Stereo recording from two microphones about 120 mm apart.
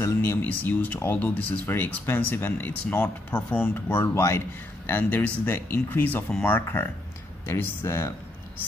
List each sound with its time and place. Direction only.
0.0 s speech: 20° left (ahead or behind)